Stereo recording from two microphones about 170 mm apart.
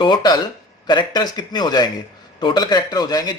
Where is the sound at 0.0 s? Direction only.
25° left (ahead or behind).